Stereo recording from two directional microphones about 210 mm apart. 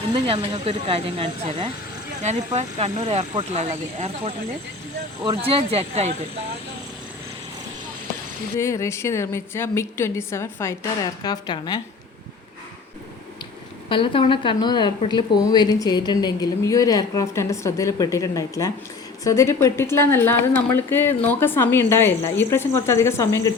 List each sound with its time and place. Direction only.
0.1 s speech: 25° right (ahead or behind)
5.7 s speech: 30° right (ahead or behind)
8.5 s a woman's voice: 15° left (ahead or behind)
13.9 s a woman's voice: 25° left (ahead or behind)